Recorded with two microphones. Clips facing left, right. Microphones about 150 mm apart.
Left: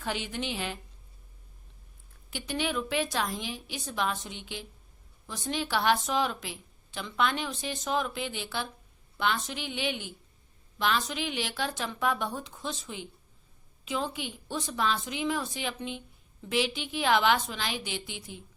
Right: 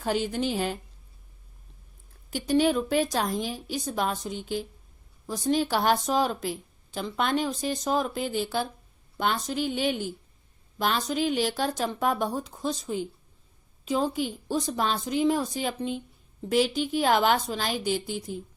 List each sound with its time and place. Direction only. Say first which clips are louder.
0.0 s a woman's voice: right 7 dB; 40° right (ahead or behind)
2.3 s a woman's voice: right 9 dB; 40° right (ahead or behind)